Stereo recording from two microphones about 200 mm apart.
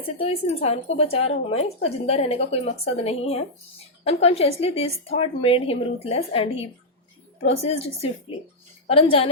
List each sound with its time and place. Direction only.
0.2 s a woman's voice: 30° left (ahead or behind)